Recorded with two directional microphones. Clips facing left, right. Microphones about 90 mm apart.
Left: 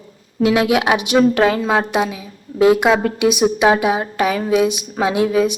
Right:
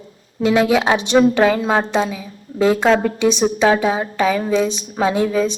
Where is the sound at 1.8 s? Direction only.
15° left (ahead or behind).